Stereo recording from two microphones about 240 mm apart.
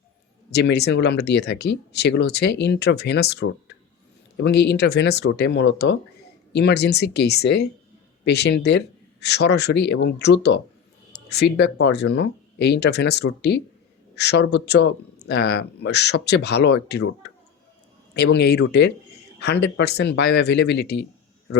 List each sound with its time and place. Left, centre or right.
0.5 s speech: left
18.1 s speech: left